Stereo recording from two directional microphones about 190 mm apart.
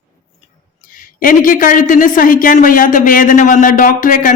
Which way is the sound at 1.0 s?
45° left (ahead or behind).